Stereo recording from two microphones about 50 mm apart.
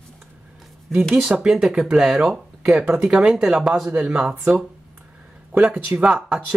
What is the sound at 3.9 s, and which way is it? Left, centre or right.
Speech, right.